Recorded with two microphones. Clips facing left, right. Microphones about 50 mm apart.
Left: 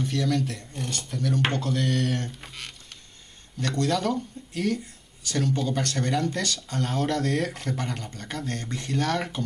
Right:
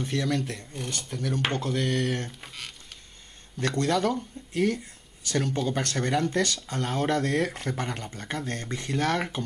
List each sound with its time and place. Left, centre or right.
0.0 s speech: centre
2.4 s a sound: centre
3.7 s speech: right
4.0 s speech: centre